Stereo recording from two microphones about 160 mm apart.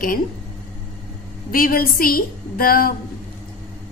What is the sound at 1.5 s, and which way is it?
A woman's voice, 65° left (ahead or behind).